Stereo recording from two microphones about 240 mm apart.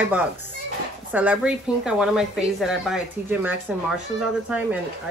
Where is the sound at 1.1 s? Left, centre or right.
Centre.